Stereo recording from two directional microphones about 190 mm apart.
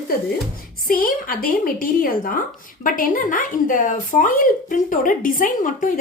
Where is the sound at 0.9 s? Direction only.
50° left (ahead or behind).